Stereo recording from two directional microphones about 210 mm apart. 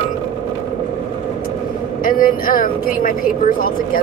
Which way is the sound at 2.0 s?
40° left (ahead or behind).